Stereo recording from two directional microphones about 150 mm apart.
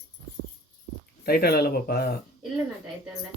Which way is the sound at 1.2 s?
90° left.